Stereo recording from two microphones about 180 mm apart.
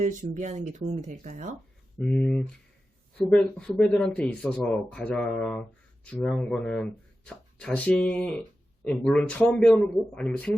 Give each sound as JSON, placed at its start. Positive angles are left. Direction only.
{"t": 0.0, "sound": "speech", "side_deg": -45}
{"t": 2.0, "sound": "a man's voice", "side_deg": 5}